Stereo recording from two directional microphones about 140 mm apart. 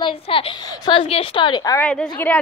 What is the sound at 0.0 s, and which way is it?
A woman's voice, 40° left (ahead or behind).